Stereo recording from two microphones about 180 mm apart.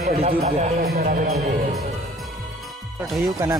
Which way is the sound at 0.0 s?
35° right (ahead or behind).